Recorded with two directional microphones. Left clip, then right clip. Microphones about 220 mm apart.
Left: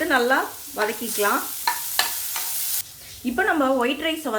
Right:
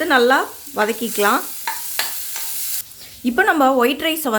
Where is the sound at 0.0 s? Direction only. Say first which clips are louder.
Right 5 dB; 50° right (ahead or behind).